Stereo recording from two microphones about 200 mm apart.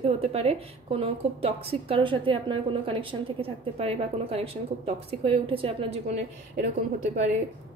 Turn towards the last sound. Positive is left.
turn(degrees=-40)  # may be behind; listen again after turning